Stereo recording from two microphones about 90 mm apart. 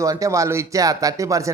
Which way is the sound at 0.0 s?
35° right (ahead or behind).